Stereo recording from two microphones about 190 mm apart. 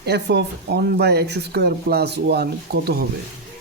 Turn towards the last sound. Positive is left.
turn(degrees=-55)  # may be behind; listen again after turning